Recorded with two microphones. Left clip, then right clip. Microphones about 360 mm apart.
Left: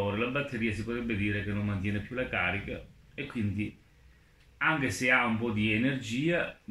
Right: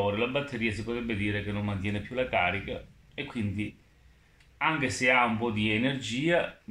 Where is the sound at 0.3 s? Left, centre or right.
Centre.